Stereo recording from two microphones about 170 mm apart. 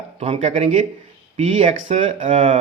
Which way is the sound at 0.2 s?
40° right (ahead or behind).